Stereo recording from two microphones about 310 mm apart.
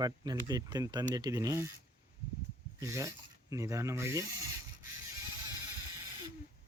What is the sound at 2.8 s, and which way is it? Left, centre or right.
Speech, centre.